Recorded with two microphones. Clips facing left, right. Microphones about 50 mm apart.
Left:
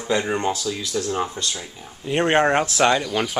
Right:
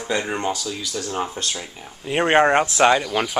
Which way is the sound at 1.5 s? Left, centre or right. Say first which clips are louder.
Right 1 dB; centre.